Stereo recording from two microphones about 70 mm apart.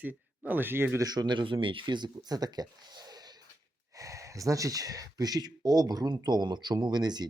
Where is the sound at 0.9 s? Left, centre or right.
Right.